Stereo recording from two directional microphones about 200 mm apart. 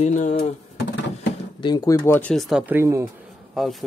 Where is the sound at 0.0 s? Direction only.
35° left (ahead or behind).